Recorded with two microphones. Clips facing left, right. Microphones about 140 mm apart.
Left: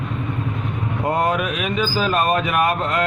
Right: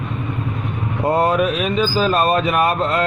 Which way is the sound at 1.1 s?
30° right (ahead or behind).